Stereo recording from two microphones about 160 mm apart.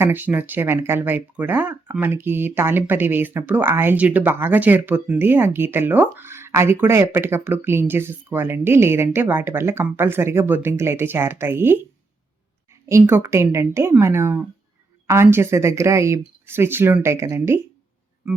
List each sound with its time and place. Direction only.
0.0 s speech: 10° right (ahead or behind)
12.9 s speech: 15° right (ahead or behind)